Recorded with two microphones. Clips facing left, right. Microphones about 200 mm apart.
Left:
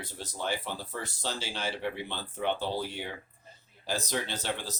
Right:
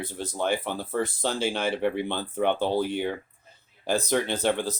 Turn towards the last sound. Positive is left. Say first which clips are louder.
# right 10 dB
turn(degrees=-55)  # may be behind; listen again after turning